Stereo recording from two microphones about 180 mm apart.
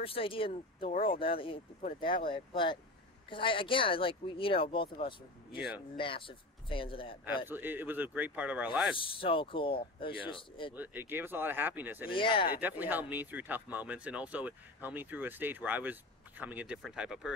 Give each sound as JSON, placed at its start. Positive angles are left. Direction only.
{"t": 0.0, "sound": "speech", "side_deg": 30}
{"t": 7.4, "sound": "speech", "side_deg": -10}
{"t": 8.9, "sound": "speech", "side_deg": 30}
{"t": 10.7, "sound": "speech", "side_deg": -10}
{"t": 12.2, "sound": "speech", "side_deg": 30}
{"t": 12.5, "sound": "speech", "side_deg": -10}